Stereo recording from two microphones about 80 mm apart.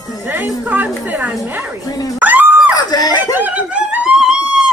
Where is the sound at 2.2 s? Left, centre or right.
Right.